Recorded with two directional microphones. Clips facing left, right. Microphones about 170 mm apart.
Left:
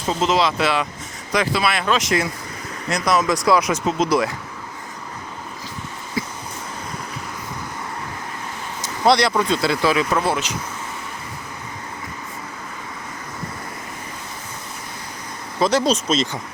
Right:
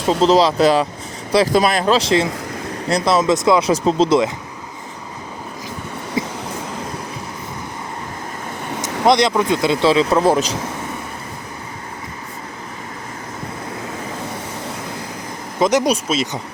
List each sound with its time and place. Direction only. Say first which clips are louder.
0.2 s speech: right 6 dB; 35° right (ahead or behind)
6.2 s a sound: right 4 dB; 20° right (ahead or behind)
8.8 s speech: right 2 dB; 20° right (ahead or behind); by 10.6 s 40° right (ahead or behind)
15.5 s speech: right 2 dB; 15° right (ahead or behind)